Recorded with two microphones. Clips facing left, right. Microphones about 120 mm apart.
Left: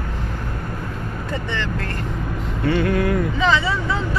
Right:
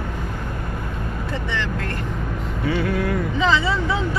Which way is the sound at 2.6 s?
Centre (ahead or behind).